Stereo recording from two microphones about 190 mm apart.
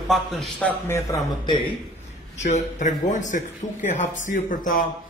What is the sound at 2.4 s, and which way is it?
Speech, 40° left (ahead or behind).